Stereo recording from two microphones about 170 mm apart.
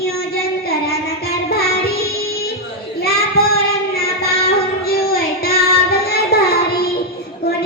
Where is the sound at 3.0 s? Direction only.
65° left (ahead or behind).